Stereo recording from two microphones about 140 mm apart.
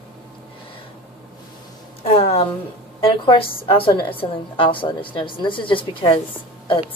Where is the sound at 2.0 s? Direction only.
45° left (ahead or behind).